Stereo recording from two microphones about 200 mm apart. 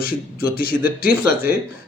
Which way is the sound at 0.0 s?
50° left (ahead or behind).